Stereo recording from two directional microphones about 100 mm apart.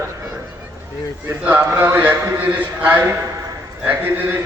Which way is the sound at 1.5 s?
20° right (ahead or behind).